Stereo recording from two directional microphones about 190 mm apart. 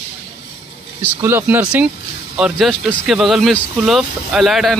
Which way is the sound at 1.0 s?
10° right (ahead or behind).